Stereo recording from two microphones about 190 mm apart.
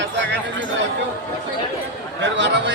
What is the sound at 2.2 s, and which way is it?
Speech, 70° right (ahead or behind).